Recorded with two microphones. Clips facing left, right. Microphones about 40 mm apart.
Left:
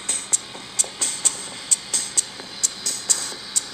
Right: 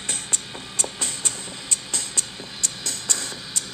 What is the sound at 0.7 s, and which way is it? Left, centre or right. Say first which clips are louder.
Music: right 1 dB; right.